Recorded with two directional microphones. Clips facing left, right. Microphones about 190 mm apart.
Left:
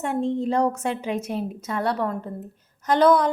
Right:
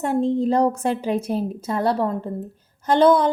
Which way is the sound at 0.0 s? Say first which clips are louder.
Right 4 dB; 35° right (ahead or behind).